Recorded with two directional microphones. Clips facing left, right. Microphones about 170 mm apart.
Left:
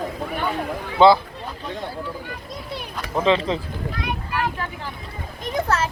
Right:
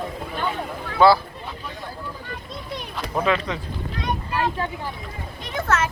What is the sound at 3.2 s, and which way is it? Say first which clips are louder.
Speech: left 5 dB; 25° left (ahead or behind).